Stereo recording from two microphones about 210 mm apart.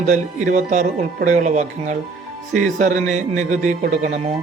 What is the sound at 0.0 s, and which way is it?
Speech, 35° right (ahead or behind).